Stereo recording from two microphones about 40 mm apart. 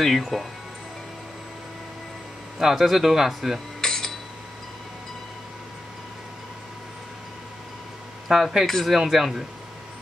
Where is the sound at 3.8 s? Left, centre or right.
Centre.